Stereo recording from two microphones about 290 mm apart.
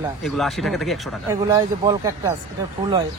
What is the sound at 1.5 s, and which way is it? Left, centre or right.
Speech, centre.